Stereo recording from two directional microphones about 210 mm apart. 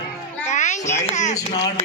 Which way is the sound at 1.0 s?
35° left (ahead or behind).